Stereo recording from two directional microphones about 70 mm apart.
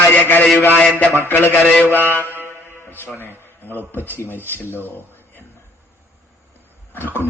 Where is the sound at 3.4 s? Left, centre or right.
Left.